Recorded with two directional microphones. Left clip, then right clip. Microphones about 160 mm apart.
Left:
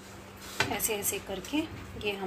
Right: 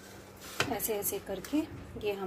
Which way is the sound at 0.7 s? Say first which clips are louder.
Left 2 dB; 40° right (ahead or behind).